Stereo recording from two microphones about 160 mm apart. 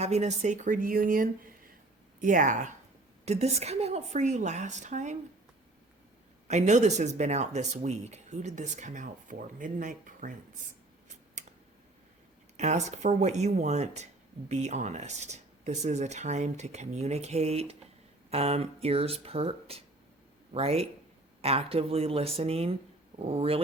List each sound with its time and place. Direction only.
0.0 s speech: 45° right (ahead or behind)
6.5 s speech: 45° right (ahead or behind)
12.5 s speech: 45° right (ahead or behind)